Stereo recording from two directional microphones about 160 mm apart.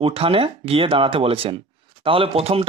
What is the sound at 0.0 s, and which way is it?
Speech, 35° right (ahead or behind).